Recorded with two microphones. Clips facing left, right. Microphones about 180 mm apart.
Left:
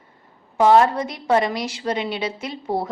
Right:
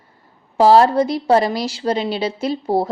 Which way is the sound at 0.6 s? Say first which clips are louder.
Right 3 dB; 30° right (ahead or behind).